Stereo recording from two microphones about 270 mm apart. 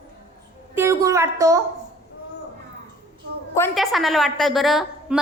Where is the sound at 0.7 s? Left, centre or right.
Centre.